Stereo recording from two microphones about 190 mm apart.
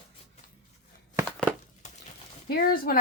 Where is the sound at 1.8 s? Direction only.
40° left (ahead or behind).